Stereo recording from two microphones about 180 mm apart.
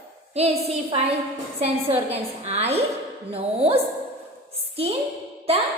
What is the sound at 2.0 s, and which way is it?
A woman's voice, 35° right (ahead or behind).